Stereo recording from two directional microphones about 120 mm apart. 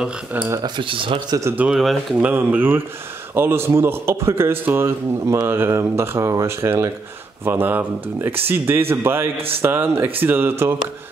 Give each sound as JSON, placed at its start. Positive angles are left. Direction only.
{"t": 0.0, "sound": "speech", "side_deg": -15}
{"t": 0.6, "sound": "speech", "side_deg": -45}
{"t": 1.4, "sound": "speech", "side_deg": -15}
{"t": 1.7, "sound": "speech", "side_deg": 0}
{"t": 2.1, "sound": "a man's voice", "side_deg": -15}